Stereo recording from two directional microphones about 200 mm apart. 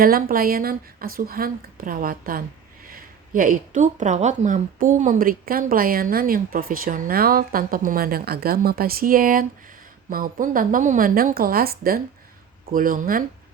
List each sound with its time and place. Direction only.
0.0 s speech: 45° right (ahead or behind)